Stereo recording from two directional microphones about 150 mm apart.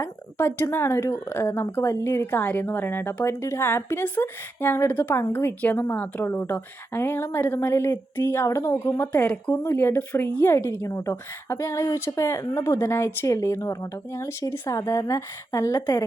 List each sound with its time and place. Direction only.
0.0 s speech: 15° left (ahead or behind)